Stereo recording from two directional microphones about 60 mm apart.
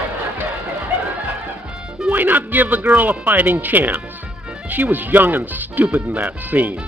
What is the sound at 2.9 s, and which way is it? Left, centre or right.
Speech, right.